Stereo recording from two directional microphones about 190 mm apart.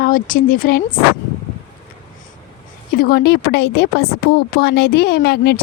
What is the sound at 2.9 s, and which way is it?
Speech, 50° left (ahead or behind).